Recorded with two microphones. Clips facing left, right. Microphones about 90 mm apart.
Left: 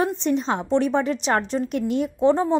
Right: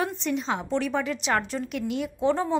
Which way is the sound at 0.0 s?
35° left (ahead or behind).